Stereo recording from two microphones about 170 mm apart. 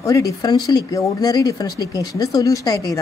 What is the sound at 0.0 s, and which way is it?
Speech, 20° left (ahead or behind).